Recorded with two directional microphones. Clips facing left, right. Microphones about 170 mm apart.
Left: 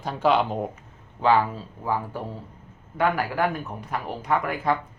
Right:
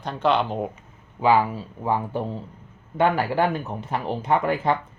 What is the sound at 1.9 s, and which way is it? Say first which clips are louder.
Speech: right 3 dB; 25° right (ahead or behind).